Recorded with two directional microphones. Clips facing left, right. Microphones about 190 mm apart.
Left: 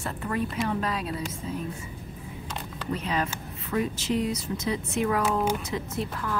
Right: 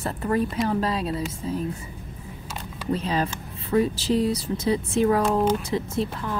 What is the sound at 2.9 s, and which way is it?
Speech, 30° right (ahead or behind).